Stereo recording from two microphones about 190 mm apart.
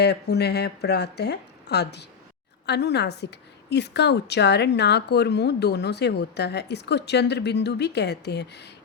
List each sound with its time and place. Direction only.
0.0 s a woman's voice: 60° left (ahead or behind)